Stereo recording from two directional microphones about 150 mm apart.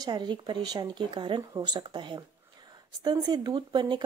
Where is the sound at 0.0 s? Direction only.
30° right (ahead or behind).